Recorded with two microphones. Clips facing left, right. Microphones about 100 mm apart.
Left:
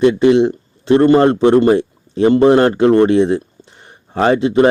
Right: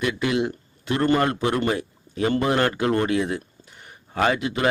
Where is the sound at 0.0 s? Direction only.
30° left (ahead or behind).